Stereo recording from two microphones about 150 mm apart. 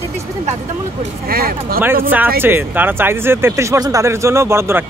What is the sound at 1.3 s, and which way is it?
Speech, 85° right.